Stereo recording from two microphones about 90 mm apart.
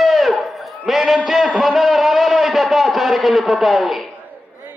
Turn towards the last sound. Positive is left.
turn(degrees=0)  # may be behind; listen again after turning